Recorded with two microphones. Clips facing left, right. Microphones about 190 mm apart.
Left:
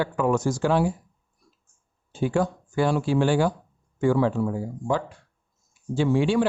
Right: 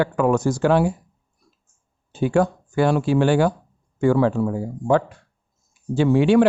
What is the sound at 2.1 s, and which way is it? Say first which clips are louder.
Speech: right 5 dB; 65° right (ahead or behind).